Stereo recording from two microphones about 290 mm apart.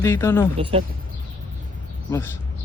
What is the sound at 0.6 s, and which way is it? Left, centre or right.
Speech, centre.